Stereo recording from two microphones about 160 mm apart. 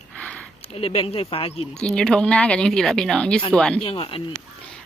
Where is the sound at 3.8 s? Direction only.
35° left (ahead or behind).